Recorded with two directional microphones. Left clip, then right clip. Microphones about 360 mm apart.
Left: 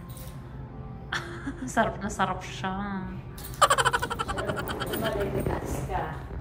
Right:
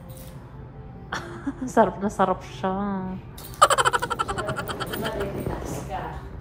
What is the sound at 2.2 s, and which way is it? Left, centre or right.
Speech, centre.